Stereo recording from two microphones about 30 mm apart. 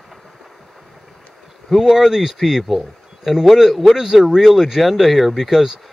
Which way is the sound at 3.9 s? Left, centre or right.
Centre.